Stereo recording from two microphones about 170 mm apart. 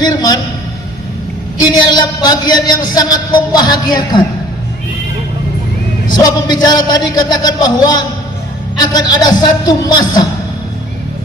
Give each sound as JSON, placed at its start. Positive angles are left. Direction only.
{"t": 0.0, "sound": "speech", "side_deg": 25}
{"t": 1.7, "sound": "speech", "side_deg": 25}
{"t": 6.1, "sound": "speech", "side_deg": 25}